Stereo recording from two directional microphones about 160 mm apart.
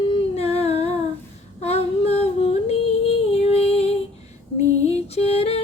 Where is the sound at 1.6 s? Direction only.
40° left (ahead or behind).